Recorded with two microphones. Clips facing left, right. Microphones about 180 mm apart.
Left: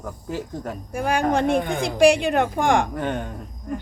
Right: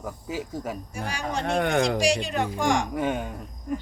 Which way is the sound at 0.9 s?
55° left (ahead or behind).